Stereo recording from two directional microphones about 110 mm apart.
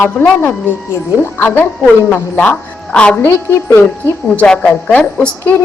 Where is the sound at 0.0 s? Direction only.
15° left (ahead or behind).